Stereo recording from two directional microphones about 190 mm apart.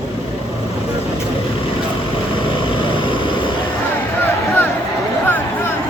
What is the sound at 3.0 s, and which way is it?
Vehicle, 25° left (ahead or behind).